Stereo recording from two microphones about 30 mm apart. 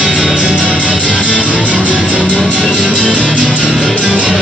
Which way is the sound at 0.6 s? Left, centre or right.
Right.